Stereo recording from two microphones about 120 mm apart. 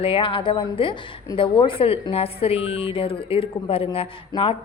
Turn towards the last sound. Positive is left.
turn(degrees=50)  # may be behind; listen again after turning